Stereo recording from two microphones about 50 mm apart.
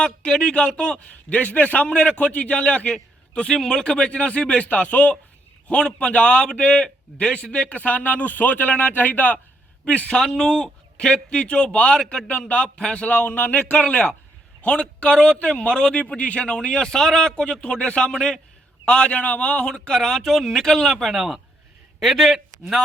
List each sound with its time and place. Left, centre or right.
0.0 s speech: centre
1.1 s a man's voice: left
9.8 s a man's voice: left
13.2 s a man's voice: left
13.8 s a man's voice: left
16.0 s speech: left; by 21.1 s centre
21.1 s a man's voice: centre